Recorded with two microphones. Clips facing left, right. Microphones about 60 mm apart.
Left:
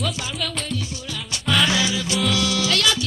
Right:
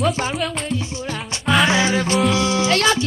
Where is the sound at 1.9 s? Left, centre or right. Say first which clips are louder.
Right 6 dB; right.